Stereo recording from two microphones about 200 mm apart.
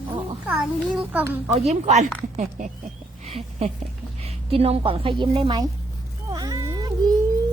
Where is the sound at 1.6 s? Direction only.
35° right (ahead or behind).